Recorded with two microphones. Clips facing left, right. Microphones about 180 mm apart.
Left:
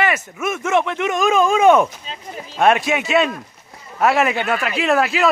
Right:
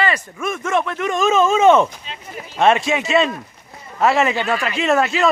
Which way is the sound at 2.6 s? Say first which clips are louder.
Even; centre (ahead or behind).